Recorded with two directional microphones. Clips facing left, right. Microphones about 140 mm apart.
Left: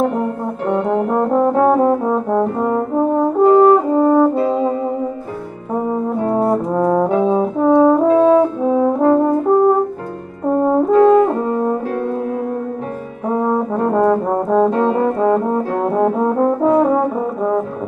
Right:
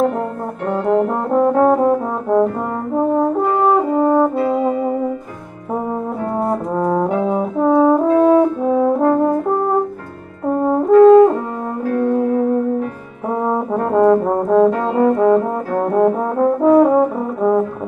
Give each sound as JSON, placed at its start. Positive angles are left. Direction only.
{"t": 0.8, "sound": "brass instrument", "side_deg": 0}
{"t": 3.2, "sound": "french horn", "side_deg": 0}
{"t": 4.4, "sound": "brass instrument", "side_deg": 25}
{"t": 6.4, "sound": "brass instrument", "side_deg": 5}
{"t": 10.4, "sound": "french horn", "side_deg": 0}
{"t": 13.4, "sound": "brass instrument", "side_deg": 0}